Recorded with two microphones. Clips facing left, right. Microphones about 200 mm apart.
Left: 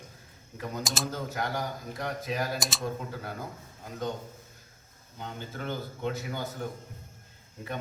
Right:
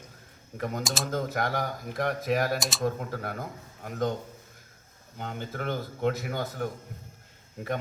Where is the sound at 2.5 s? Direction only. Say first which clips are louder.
Right 2 dB; centre (ahead or behind).